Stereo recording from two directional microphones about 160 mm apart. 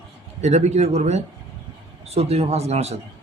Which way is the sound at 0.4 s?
45° right (ahead or behind).